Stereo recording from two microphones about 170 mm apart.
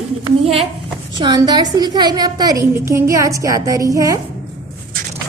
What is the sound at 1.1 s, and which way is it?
A woman's voice, 25° right (ahead or behind).